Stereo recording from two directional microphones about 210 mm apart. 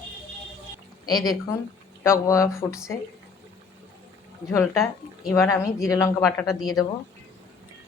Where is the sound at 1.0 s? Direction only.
20° left (ahead or behind).